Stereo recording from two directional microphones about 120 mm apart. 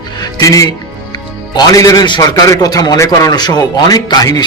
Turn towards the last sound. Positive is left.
turn(degrees=35)  # may be behind; listen again after turning